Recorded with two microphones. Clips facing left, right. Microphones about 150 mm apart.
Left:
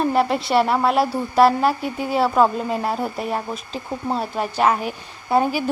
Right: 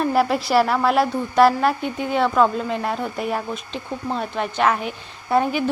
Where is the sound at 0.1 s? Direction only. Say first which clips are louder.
Even; centre (ahead or behind).